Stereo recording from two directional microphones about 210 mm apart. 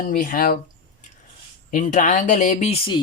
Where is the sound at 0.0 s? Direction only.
40° left (ahead or behind).